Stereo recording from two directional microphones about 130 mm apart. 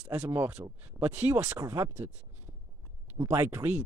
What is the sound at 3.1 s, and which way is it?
Speech, 25° right (ahead or behind).